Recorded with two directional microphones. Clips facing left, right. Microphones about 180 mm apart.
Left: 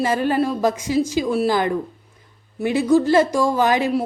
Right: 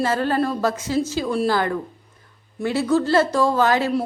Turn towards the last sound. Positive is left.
turn(degrees=15)  # may be behind; listen again after turning